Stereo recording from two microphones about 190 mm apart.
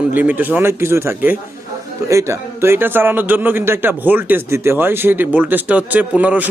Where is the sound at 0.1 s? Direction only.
10° right (ahead or behind).